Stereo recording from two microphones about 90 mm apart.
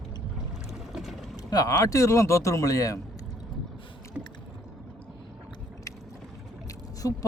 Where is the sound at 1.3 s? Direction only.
45° left (ahead or behind).